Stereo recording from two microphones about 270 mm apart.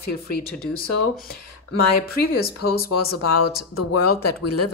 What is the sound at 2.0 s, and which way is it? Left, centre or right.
Speech, left.